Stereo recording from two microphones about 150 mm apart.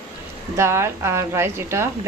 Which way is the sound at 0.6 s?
20° right (ahead or behind).